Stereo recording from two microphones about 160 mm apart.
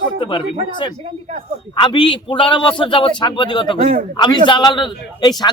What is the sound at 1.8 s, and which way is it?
A man's voice, 30° left (ahead or behind).